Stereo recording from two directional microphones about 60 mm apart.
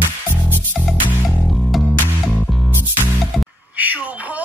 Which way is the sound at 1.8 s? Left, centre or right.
Right.